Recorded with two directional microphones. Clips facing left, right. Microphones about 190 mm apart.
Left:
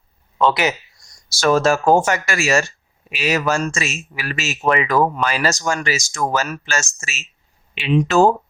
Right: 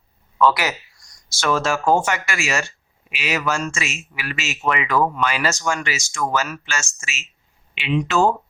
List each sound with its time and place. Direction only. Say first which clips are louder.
0.3 s speech: left 1 dB; 25° left (ahead or behind)
1.4 s speech: left 5 dB; 40° left (ahead or behind)